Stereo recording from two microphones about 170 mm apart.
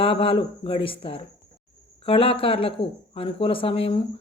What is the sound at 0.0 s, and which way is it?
Speech, 35° left (ahead or behind).